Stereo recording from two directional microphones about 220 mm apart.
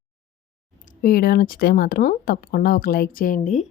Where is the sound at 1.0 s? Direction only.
40° left (ahead or behind).